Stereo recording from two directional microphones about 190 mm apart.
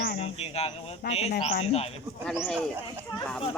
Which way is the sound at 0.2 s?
35° left (ahead or behind).